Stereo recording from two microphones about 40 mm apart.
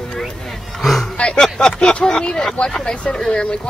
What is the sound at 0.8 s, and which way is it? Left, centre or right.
Speech, centre.